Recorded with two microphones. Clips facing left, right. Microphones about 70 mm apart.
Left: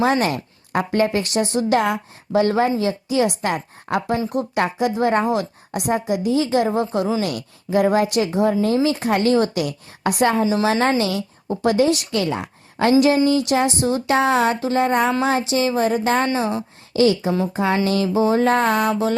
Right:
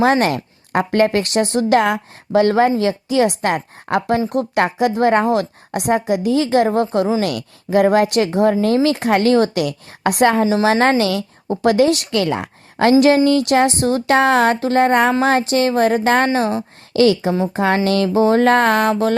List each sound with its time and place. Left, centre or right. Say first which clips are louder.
0.0 s speech: right 4 dB; right
3.2 s speech: right 4 dB; right
6.7 s speech: right 4 dB; right
8.6 s speech: right 3 dB; right
10.6 s speech: right 4 dB; right
13.1 s speech: right 4 dB; right
16.9 s speech: right 3 dB; right
17.5 s speech: right 4 dB; right